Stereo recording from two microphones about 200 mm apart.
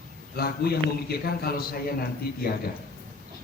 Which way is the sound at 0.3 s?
50° left (ahead or behind).